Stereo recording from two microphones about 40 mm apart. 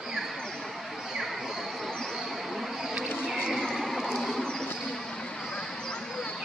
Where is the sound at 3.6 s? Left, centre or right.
Centre.